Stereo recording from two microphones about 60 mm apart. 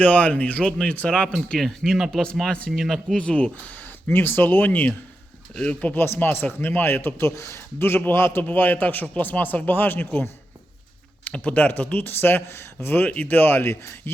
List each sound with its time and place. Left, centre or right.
0.0 s speech: left
1.5 s speech: centre
2.2 s speech: centre
3.2 s speech: centre
4.0 s a man's voice: left
5.9 s a man's voice: left
11.3 s a man's voice: left
13.1 s a man's voice: left